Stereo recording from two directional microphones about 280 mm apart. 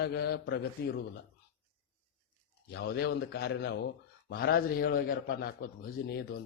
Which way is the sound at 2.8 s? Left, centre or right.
Left.